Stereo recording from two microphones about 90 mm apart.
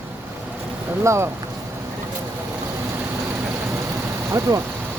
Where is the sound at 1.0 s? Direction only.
30° right (ahead or behind).